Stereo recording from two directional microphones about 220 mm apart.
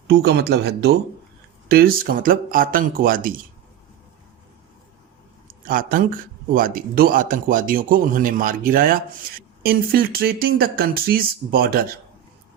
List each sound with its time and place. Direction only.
0.1 s speech: 45° right (ahead or behind)
5.5 s a sound: 40° right (ahead or behind)
6.5 s speech: 40° right (ahead or behind)